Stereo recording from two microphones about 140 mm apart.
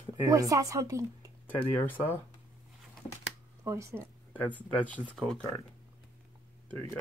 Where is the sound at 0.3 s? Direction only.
25° right (ahead or behind).